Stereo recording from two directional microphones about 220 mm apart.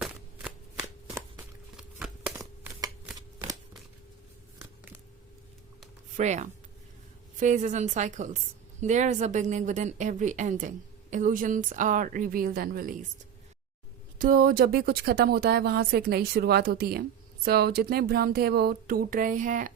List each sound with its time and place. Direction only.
0.0 s a sound: 5° right (ahead or behind)
2.3 s shuffling cards: 15° right (ahead or behind)
6.1 s a woman's voice: 35° right (ahead or behind)
14.2 s speech: 40° right (ahead or behind)